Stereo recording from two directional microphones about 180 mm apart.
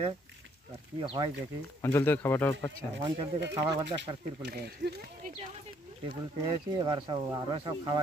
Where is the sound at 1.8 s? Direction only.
15° left (ahead or behind).